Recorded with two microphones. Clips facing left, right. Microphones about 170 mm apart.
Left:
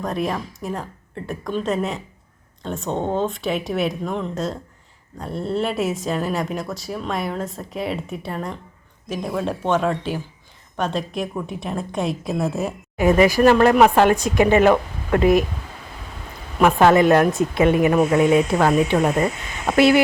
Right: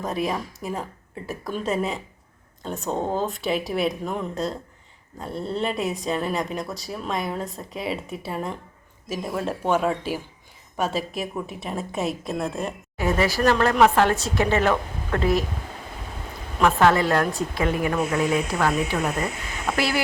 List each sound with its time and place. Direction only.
0.0 s a woman's voice: centre (ahead or behind)
13.0 s speech: 15° left (ahead or behind)
16.6 s a woman's voice: 15° left (ahead or behind)
18.9 s speech: 40° left (ahead or behind)
19.7 s a woman's voice: 20° left (ahead or behind)